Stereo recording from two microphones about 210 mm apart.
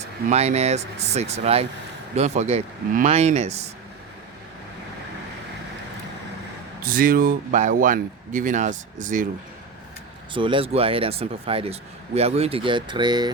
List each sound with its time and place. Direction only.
0.3 s speech: 30° right (ahead or behind)
6.8 s speech: 45° right (ahead or behind)
10.3 s speech: 25° right (ahead or behind)